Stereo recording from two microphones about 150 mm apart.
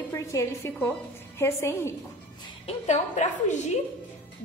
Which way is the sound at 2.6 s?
50° left (ahead or behind).